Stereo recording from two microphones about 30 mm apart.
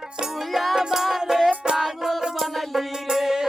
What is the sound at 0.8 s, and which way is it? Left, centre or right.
Music, centre.